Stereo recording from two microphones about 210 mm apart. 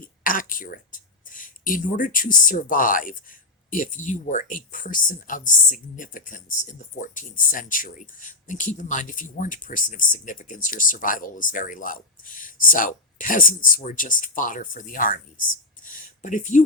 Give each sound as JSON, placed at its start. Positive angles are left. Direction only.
{"t": 0.0, "sound": "speech", "side_deg": 40}